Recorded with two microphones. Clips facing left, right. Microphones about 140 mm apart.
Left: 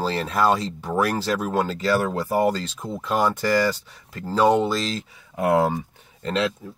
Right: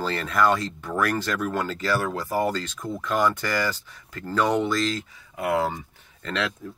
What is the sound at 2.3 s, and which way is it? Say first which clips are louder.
Speech: left 4 dB; 15° left (ahead or behind).